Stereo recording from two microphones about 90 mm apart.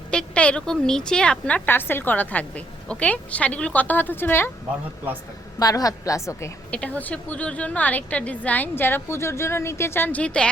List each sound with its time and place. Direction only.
0.1 s a woman's voice: 10° left (ahead or behind)
5.5 s a woman's voice: 40° left (ahead or behind)
6.7 s a woman's voice: 15° left (ahead or behind)